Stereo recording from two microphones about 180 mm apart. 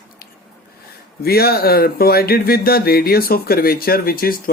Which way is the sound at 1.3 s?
60° left (ahead or behind).